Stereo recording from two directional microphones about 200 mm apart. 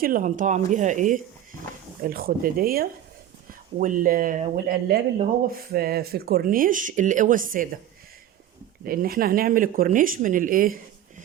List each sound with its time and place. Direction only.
0.0 s speech: 40° right (ahead or behind)
8.8 s speech: 45° right (ahead or behind)